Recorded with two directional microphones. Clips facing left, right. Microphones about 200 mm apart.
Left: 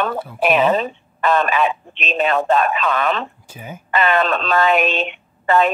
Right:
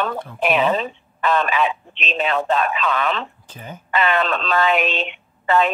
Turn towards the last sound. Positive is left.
turn(degrees=45)  # may be behind; listen again after turning